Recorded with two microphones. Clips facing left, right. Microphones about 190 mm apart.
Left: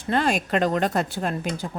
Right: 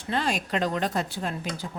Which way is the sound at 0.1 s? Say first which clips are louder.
Left 5 dB; 55° left (ahead or behind).